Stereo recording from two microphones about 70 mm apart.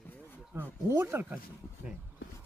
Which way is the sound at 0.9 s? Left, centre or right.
Right.